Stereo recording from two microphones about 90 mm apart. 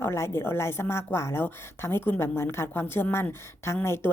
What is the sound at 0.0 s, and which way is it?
A woman's voice, 30° left (ahead or behind).